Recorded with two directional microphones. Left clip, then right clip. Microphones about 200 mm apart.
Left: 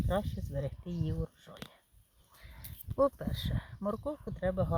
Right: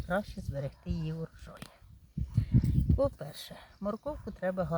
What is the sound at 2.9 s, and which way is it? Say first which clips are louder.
Speech: left 3 dB; 20° left (ahead or behind).